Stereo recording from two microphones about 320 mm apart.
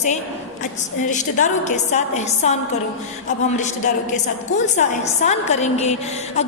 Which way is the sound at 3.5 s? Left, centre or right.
Left.